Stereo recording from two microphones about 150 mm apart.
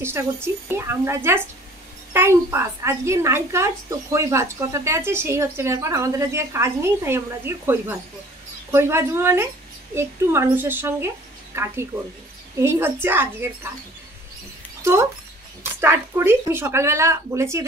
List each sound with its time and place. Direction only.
0.0 s a woman's voice: 15° right (ahead or behind)
14.8 s mouse: 20° right (ahead or behind)
15.6 s speech: 15° right (ahead or behind)